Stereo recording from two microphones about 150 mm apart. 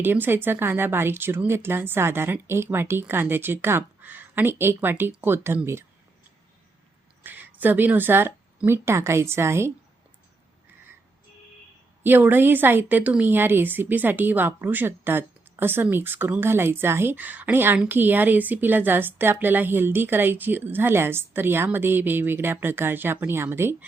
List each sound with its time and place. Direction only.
0.0 s speech: 15° right (ahead or behind)
7.3 s speech: 10° right (ahead or behind)
12.0 s speech: 15° right (ahead or behind)